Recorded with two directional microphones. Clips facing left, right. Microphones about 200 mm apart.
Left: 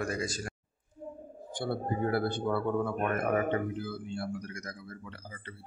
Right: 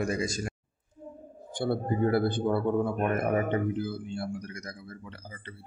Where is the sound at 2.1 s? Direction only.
20° right (ahead or behind).